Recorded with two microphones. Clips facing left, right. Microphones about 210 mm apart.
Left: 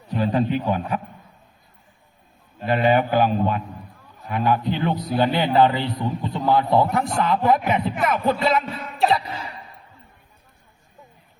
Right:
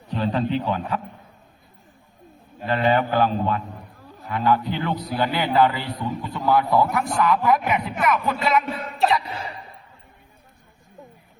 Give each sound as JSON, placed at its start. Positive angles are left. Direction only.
{"t": 0.1, "sound": "a man's voice", "side_deg": 10}
{"t": 2.6, "sound": "a man's voice", "side_deg": 15}